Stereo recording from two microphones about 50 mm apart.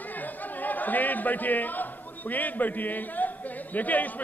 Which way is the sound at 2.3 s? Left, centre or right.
Left.